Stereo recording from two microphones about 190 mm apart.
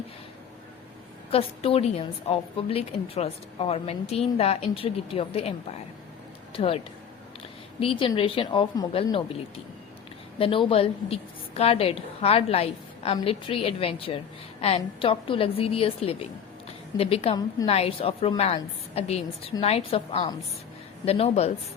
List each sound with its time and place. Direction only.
1.3 s a woman's voice: 30° left (ahead or behind)
7.8 s a woman's voice: 30° left (ahead or behind)